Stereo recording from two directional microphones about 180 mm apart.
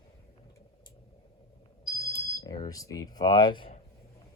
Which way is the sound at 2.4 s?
20° left (ahead or behind).